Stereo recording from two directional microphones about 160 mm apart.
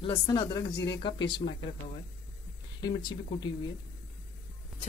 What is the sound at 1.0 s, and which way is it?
Speech, 30° left (ahead or behind).